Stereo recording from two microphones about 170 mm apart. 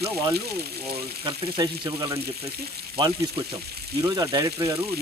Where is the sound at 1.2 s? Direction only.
25° right (ahead or behind).